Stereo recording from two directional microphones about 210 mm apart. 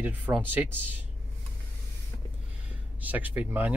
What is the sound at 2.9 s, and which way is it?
Speech, 10° right (ahead or behind).